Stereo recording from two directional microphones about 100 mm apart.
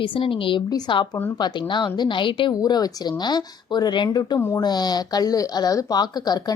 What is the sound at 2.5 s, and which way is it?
A woman's voice, 40° left (ahead or behind).